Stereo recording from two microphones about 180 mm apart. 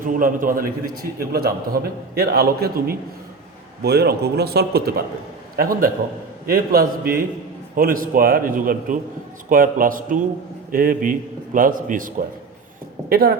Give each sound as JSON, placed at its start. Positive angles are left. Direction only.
{"t": 0.0, "sound": "a man's voice", "side_deg": -50}